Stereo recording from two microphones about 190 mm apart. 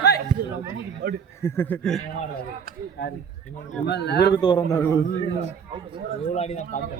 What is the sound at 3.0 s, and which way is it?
Speech, 65° left (ahead or behind).